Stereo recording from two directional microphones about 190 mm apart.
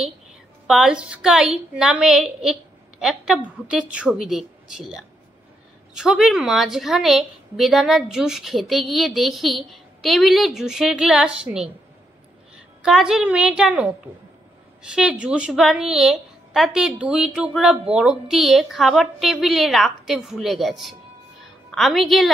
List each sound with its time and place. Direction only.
0.7 s a woman's voice: 5° right (ahead or behind)